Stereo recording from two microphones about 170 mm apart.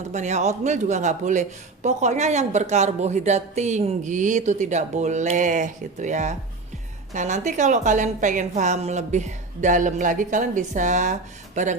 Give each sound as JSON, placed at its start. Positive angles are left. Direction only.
{"t": 0.1, "sound": "speech", "side_deg": -45}